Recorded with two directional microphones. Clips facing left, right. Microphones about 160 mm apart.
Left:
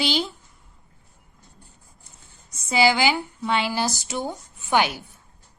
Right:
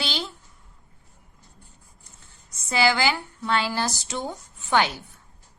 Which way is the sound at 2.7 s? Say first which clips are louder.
Left 2 dB; 20° left (ahead or behind).